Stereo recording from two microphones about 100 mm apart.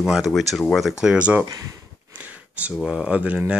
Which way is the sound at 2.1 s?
15° right (ahead or behind).